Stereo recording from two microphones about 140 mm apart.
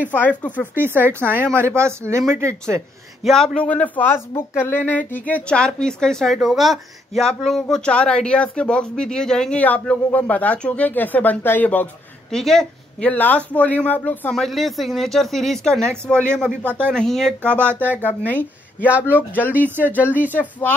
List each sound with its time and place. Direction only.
0.1 s a woman's voice: 10° left (ahead or behind)
0.7 s speech: 15° right (ahead or behind)
3.3 s a woman's voice: 5° left (ahead or behind)
14.3 s a woman's voice: centre (ahead or behind)